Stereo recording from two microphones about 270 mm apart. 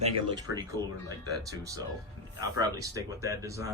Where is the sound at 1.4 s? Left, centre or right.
Centre.